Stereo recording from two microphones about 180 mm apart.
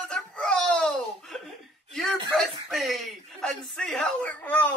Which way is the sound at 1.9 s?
5° left (ahead or behind).